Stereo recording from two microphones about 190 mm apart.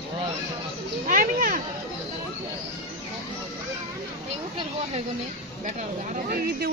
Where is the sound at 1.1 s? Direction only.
45° right (ahead or behind).